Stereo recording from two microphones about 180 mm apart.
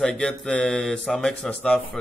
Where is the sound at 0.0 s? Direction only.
Centre (ahead or behind).